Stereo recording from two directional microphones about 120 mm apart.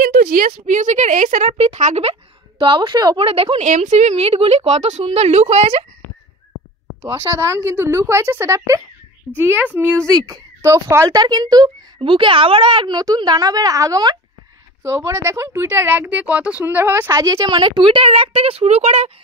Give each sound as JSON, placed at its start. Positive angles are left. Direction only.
{"t": 0.6, "sound": "speech", "side_deg": -90}
{"t": 2.6, "sound": "a woman's voice", "side_deg": -45}
{"t": 3.6, "sound": "a woman's voice", "side_deg": -90}
{"t": 4.2, "sound": "speech", "side_deg": -55}
{"t": 7.0, "sound": "speech", "side_deg": -25}
{"t": 10.0, "sound": "speech", "side_deg": -30}
{"t": 11.1, "sound": "speech", "side_deg": -35}
{"t": 12.0, "sound": "speech", "side_deg": -45}
{"t": 17.5, "sound": "a woman's voice", "side_deg": -40}